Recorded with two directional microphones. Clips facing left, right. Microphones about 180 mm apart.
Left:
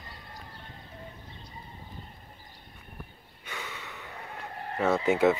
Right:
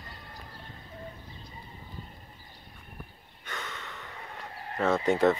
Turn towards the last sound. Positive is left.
turn(degrees=5)  # may be behind; listen again after turning